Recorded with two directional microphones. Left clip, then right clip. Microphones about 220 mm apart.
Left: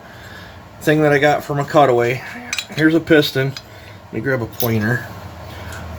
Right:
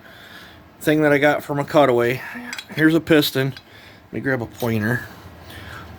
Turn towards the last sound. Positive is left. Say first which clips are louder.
# left 3 dB
turn(degrees=-55)  # may be behind; listen again after turning